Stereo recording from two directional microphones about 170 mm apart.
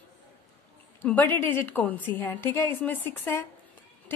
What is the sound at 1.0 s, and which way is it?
A woman's voice, 10° left (ahead or behind).